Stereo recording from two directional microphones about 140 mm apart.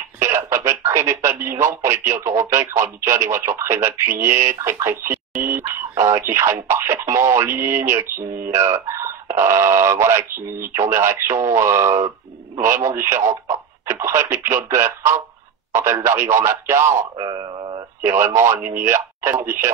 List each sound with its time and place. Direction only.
0.2 s speech: 20° right (ahead or behind)
17.2 s speech: 35° right (ahead or behind)
18.0 s speech: 20° right (ahead or behind)